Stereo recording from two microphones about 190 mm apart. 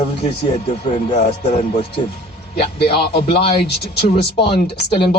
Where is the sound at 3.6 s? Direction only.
55° left (ahead or behind).